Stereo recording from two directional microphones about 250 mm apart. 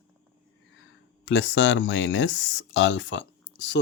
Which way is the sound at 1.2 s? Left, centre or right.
Left.